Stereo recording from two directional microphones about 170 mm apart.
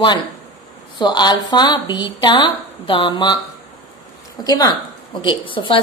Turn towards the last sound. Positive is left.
turn(degrees=30)  # may be behind; listen again after turning